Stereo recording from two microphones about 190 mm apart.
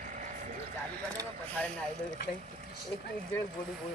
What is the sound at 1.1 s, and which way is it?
Speech, 10° left (ahead or behind).